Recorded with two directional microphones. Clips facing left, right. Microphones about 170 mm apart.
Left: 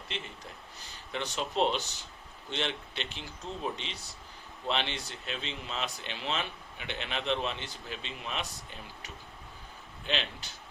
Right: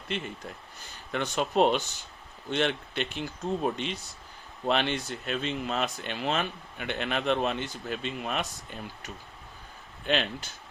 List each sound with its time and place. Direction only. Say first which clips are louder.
0.8 s speech: right 5 dB; 55° right (ahead or behind)